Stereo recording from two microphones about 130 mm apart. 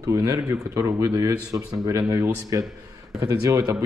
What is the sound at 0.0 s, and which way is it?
Speech, 25° right (ahead or behind).